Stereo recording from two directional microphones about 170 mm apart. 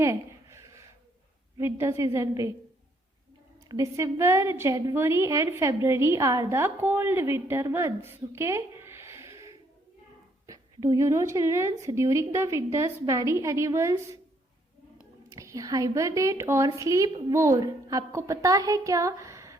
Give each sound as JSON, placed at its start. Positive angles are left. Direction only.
{"t": 0.0, "sound": "a sound", "side_deg": -15}
{"t": 1.5, "sound": "a woman's voice", "side_deg": -15}
{"t": 3.7, "sound": "a woman's voice", "side_deg": -20}
{"t": 15.3, "sound": "a woman's voice", "side_deg": -20}